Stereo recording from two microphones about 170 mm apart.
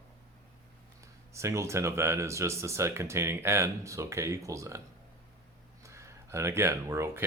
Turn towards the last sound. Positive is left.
turn(degrees=-15)  # may be behind; listen again after turning